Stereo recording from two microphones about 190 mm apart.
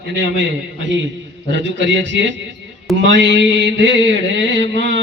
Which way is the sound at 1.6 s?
75° right (ahead or behind).